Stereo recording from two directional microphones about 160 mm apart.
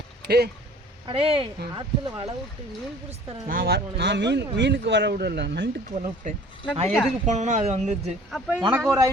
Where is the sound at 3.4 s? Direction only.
70° right (ahead or behind); by 5.6 s 90° right.